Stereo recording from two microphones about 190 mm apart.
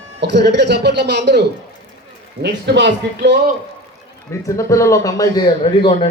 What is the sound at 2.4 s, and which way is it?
Speech, 65° right (ahead or behind).